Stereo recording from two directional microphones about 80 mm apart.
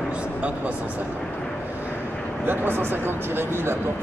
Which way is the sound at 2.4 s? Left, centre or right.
Right.